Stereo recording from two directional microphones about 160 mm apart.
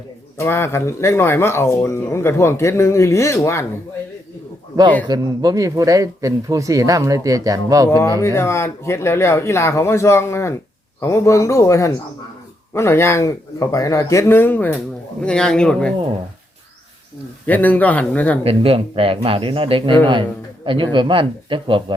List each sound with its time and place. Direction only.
0.3 s speech: 15° left (ahead or behind)
5.0 s speech: 25° right (ahead or behind)
7.9 s a man's voice: 20° left (ahead or behind)
17.4 s speech: 10° left (ahead or behind)
18.4 s speech: 35° right (ahead or behind)